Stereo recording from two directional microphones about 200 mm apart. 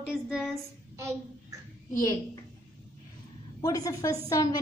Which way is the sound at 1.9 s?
15° left (ahead or behind).